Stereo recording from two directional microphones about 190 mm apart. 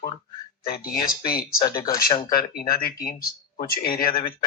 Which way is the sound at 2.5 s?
50° left (ahead or behind).